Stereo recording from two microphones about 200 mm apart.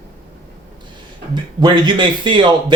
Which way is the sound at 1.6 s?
20° right (ahead or behind).